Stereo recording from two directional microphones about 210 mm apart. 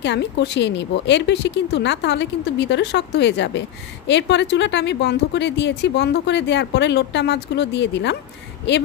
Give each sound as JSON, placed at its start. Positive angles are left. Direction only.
{"t": 0.0, "sound": "a woman's voice", "side_deg": 55}